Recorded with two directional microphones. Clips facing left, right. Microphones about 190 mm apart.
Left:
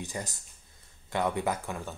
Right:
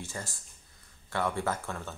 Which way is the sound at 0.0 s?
15° left (ahead or behind).